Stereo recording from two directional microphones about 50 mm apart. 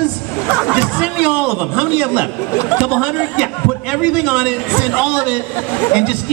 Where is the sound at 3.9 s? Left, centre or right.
Right.